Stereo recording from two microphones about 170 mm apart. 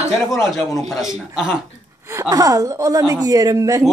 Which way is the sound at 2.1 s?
20° right (ahead or behind).